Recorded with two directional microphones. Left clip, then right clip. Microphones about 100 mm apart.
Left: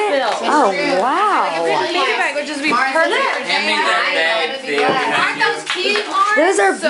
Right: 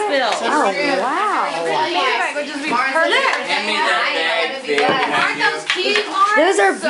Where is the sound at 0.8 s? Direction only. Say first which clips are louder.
Left 2 dB; 25° left (ahead or behind).